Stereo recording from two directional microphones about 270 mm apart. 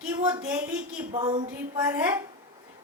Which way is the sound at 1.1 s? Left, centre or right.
Centre.